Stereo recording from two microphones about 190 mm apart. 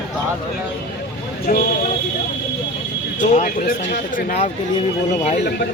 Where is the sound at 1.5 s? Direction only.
45° left (ahead or behind).